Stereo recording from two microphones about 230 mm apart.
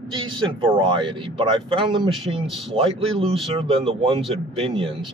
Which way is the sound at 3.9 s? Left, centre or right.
Right.